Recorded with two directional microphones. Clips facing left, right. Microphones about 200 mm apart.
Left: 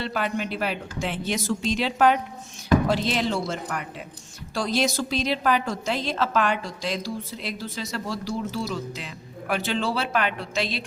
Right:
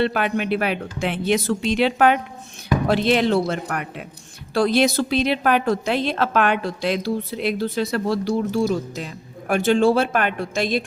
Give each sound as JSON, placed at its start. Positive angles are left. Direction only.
{"t": 0.0, "sound": "a woman's voice", "side_deg": -65}